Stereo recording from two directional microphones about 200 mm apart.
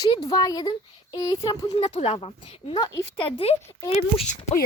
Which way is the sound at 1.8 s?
30° left (ahead or behind).